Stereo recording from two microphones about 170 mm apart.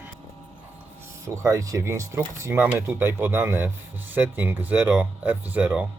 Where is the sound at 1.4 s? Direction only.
20° right (ahead or behind).